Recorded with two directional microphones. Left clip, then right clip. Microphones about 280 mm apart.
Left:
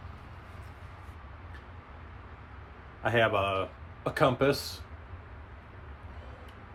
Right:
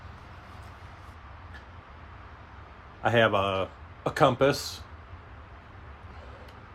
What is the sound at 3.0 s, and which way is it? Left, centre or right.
Speech, right.